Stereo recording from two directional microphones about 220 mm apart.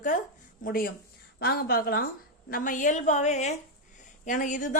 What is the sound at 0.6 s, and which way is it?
A woman's voice, 40° left (ahead or behind).